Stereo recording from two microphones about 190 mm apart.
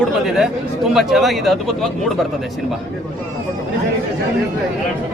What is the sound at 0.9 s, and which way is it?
Speech, centre (ahead or behind).